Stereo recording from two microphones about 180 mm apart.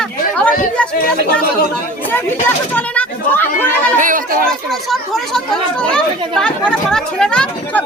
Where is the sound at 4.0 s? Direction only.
50° right (ahead or behind).